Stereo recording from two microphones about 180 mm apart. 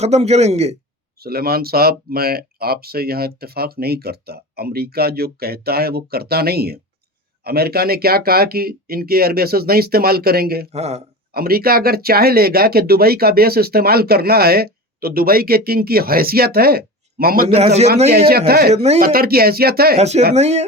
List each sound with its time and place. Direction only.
0.0 s a man's voice: 35° right (ahead or behind)
1.2 s speech: 60° right (ahead or behind)
10.7 s a man's voice: 35° right (ahead or behind)
11.3 s speech: 55° right (ahead or behind)
17.5 s a man's voice: 35° right (ahead or behind)
18.1 s speech: 60° right (ahead or behind)
18.7 s a man's voice: 35° right (ahead or behind)
18.9 s speech: 55° right (ahead or behind)
20.0 s a man's voice: 35° right (ahead or behind)